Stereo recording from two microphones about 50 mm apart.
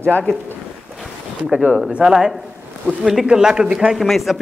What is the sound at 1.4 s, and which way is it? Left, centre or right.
Speech, centre.